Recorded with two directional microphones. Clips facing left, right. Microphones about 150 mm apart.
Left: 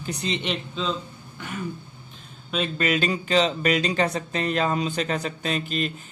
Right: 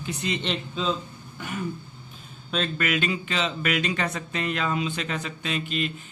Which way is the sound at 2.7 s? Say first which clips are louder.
Left 5 dB; 35° left (ahead or behind).